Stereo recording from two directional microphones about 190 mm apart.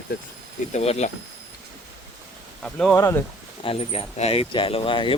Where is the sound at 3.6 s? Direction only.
30° left (ahead or behind).